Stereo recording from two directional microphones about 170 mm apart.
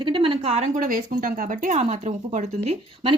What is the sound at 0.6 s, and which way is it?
Speech, 55° right (ahead or behind).